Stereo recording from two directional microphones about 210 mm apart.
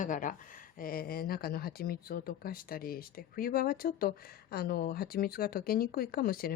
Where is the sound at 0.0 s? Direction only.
40° left (ahead or behind).